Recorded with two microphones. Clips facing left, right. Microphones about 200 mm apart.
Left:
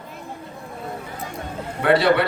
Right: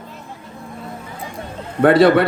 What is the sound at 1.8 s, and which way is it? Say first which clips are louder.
Speech: right 6 dB; 50° right (ahead or behind).